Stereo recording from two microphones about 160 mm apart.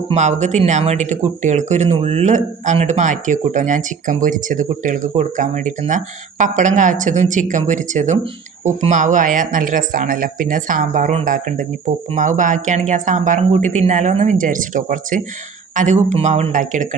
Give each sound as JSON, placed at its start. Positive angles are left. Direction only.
{"t": 0.1, "sound": "speech", "side_deg": -45}